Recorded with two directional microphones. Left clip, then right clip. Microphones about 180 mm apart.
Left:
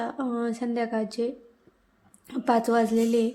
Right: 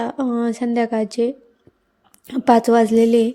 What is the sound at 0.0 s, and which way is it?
A woman's voice, 40° right (ahead or behind).